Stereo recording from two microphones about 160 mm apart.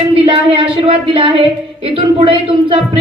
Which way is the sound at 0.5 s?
35° right (ahead or behind).